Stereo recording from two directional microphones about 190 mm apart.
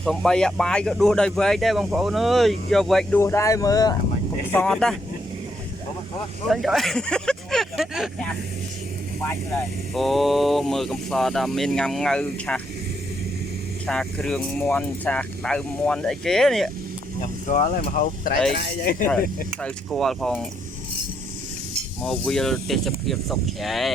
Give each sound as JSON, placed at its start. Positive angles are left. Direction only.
{"t": 0.0, "sound": "speech", "side_deg": 0}
{"t": 3.2, "sound": "speech", "side_deg": 15}
{"t": 4.5, "sound": "speech", "side_deg": 5}
{"t": 6.5, "sound": "speech", "side_deg": 0}
{"t": 9.9, "sound": "speech", "side_deg": 0}
{"t": 13.8, "sound": "speech", "side_deg": 5}
{"t": 17.2, "sound": "speech", "side_deg": 40}
{"t": 19.6, "sound": "speech", "side_deg": 0}
{"t": 22.0, "sound": "speech", "side_deg": 5}